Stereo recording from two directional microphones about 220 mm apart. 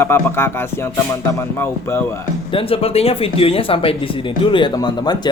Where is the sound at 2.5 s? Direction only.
25° left (ahead or behind).